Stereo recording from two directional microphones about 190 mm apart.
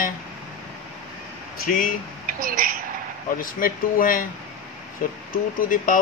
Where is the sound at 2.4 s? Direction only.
50° right (ahead or behind).